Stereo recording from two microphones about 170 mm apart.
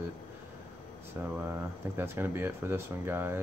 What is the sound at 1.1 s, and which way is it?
Speech, 15° right (ahead or behind).